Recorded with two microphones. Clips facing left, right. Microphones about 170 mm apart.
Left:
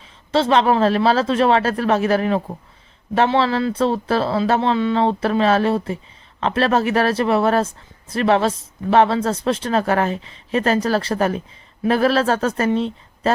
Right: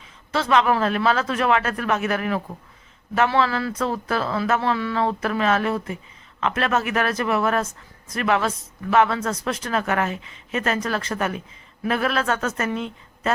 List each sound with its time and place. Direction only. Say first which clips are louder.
0.3 s a woman's voice: left 4 dB; 30° left (ahead or behind)